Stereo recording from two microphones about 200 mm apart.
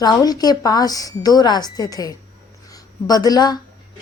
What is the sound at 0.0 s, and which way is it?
A woman's voice, 20° left (ahead or behind).